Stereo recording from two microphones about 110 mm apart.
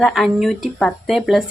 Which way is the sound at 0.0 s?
Centre (ahead or behind).